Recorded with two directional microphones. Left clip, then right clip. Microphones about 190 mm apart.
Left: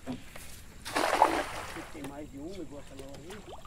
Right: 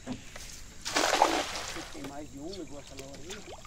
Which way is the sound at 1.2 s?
40° right (ahead or behind).